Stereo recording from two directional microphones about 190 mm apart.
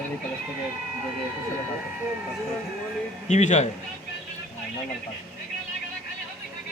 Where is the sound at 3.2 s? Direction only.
40° left (ahead or behind).